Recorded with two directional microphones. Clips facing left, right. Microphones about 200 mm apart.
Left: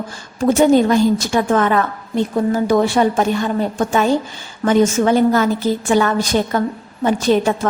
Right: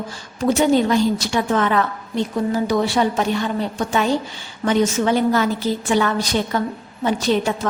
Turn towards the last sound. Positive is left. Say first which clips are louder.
# left 4 dB
turn(degrees=45)  # may be behind; listen again after turning